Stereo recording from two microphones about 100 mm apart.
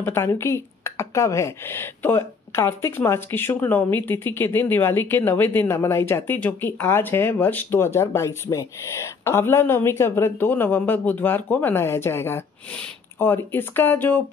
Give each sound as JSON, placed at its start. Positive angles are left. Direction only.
{"t": 0.0, "sound": "speech", "side_deg": 25}